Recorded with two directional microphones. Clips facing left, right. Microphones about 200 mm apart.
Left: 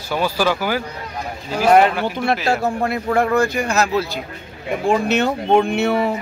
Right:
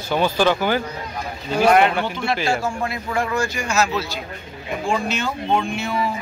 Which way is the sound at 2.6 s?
60° left (ahead or behind).